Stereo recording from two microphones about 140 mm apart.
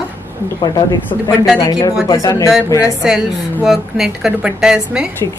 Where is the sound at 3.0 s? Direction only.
5° right (ahead or behind).